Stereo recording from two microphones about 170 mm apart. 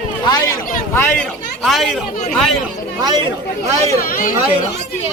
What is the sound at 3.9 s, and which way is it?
Speech, 55° left (ahead or behind).